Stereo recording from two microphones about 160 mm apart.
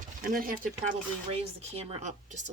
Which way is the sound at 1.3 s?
40° right (ahead or behind).